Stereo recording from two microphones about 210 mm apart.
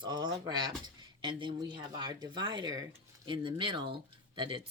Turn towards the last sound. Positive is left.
turn(degrees=-25)  # may be behind; listen again after turning